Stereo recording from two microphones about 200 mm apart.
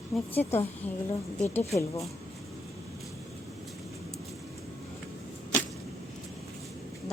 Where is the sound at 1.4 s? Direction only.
10° left (ahead or behind).